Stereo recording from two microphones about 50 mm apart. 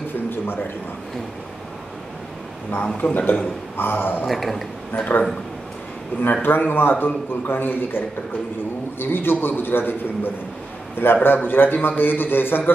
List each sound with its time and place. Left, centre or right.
3.0 s a man's voice: left
3.7 s a man's voice: left
4.3 s a man's voice: centre
4.9 s a man's voice: left
6.4 s a man's voice: left
9.0 s a man's voice: left